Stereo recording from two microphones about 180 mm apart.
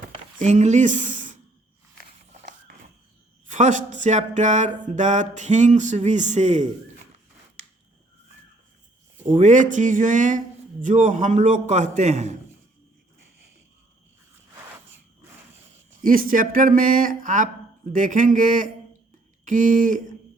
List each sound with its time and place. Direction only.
0.3 s speech: 40° right (ahead or behind)
2.3 s a sound: 40° right (ahead or behind)
3.4 s speech: 45° right (ahead or behind)
9.4 s speech: 45° right (ahead or behind)
16.0 s speech: 50° right (ahead or behind)